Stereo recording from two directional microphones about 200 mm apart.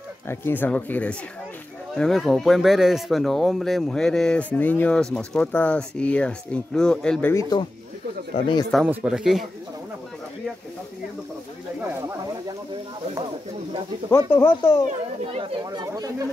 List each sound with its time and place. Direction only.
0.3 s speech: 10° left (ahead or behind)
8.7 s speech: 5° right (ahead or behind)
14.1 s speech: 10° left (ahead or behind)
15.3 s speech: 25° right (ahead or behind)